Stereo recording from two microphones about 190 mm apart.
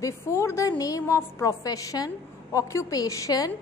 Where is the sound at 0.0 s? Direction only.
15° left (ahead or behind).